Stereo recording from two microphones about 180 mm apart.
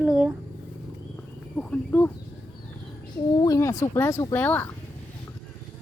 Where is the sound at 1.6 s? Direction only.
10° left (ahead or behind).